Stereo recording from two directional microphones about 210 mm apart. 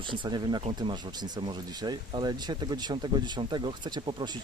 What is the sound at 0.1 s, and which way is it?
Speech, 20° right (ahead or behind).